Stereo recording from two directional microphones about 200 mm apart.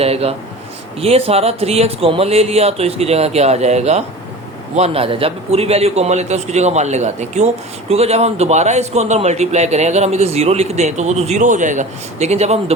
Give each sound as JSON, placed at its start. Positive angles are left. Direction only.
{"t": 0.0, "sound": "a man's voice", "side_deg": -30}